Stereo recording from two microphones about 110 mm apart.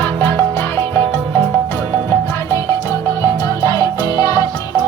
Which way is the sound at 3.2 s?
35° left (ahead or behind).